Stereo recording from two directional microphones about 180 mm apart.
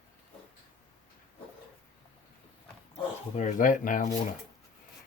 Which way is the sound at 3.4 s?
45° left (ahead or behind).